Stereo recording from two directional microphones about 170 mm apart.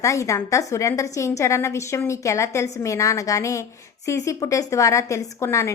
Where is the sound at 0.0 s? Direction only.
20° left (ahead or behind).